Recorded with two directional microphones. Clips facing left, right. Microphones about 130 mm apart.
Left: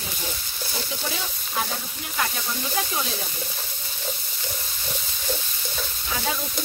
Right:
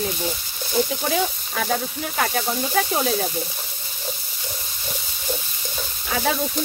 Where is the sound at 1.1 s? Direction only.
75° right (ahead or behind).